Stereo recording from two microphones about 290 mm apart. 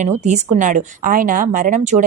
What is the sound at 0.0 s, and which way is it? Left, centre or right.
A woman's voice, right.